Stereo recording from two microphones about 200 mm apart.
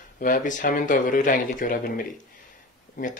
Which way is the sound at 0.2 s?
40° left (ahead or behind).